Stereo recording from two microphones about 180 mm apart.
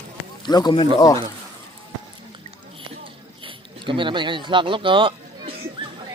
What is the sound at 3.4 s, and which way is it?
Speech, 30° right (ahead or behind).